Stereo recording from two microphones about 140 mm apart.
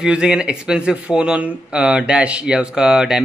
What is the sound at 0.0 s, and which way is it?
A man's voice, 5° right (ahead or behind).